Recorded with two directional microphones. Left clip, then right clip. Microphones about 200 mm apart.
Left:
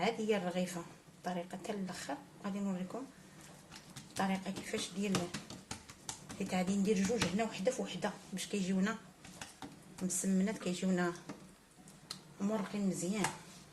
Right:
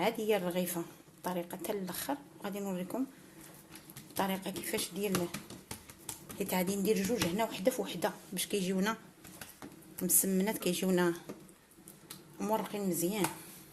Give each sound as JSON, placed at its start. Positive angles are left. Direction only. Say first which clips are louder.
{"t": 0.0, "sound": "a woman's voice", "louder": "right 3 dB", "side_deg": -40}
{"t": 4.2, "sound": "a woman's voice", "louder": "right 3 dB", "side_deg": -50}
{"t": 6.5, "sound": "a woman's voice", "louder": "right 3 dB", "side_deg": -45}
{"t": 10.2, "sound": "a woman's voice", "louder": "right 4 dB", "side_deg": -50}
{"t": 12.4, "sound": "a woman's voice", "louder": "right 5 dB", "side_deg": -45}